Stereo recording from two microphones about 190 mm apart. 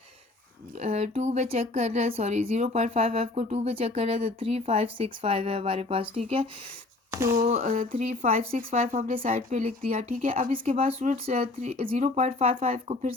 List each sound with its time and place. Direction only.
0.8 s speech: 35° right (ahead or behind)
7.1 s a sound: 15° right (ahead or behind)
7.4 s speech: 40° right (ahead or behind)
10.8 s speech: 35° right (ahead or behind)